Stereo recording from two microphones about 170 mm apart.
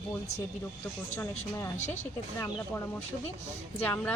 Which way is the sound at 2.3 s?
15° left (ahead or behind).